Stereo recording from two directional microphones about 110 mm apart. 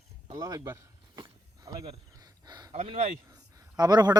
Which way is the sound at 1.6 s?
40° right (ahead or behind).